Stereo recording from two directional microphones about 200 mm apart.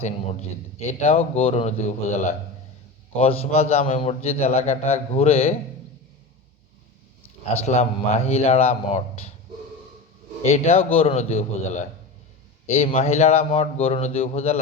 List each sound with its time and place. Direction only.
0.8 s a man's voice: 35° left (ahead or behind)
7.2 s a man's voice: 35° left (ahead or behind)
10.4 s a man's voice: 30° left (ahead or behind)